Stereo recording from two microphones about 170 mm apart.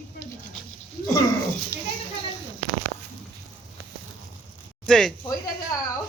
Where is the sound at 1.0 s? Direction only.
20° left (ahead or behind).